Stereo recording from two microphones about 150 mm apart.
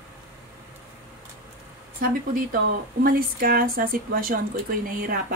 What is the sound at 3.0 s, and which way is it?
A woman's voice, 75° right (ahead or behind).